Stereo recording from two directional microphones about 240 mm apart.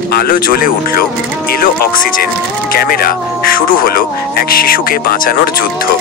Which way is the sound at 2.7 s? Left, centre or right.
Left.